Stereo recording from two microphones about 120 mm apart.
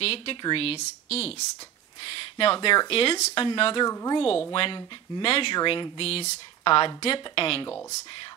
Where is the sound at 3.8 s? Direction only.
30° left (ahead or behind).